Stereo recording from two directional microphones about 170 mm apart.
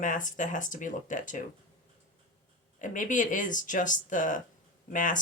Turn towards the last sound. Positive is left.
turn(degrees=50)  # may be behind; listen again after turning